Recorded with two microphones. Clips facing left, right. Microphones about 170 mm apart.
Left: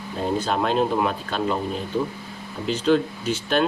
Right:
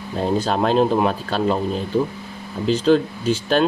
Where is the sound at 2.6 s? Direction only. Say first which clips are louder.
Right 4 dB; 35° right (ahead or behind).